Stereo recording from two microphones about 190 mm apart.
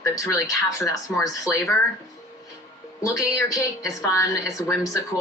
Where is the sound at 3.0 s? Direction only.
15° left (ahead or behind).